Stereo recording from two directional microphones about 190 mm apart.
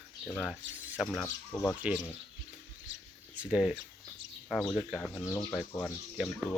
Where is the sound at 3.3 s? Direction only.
5° right (ahead or behind).